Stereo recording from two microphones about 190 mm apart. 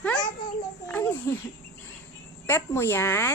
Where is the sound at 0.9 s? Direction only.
10° left (ahead or behind).